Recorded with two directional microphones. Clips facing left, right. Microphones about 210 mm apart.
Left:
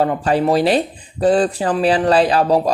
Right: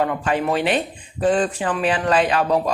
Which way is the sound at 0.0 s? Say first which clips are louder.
Left 5 dB; 35° left (ahead or behind).